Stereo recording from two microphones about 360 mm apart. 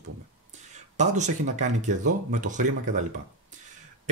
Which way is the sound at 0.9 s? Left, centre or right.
Centre.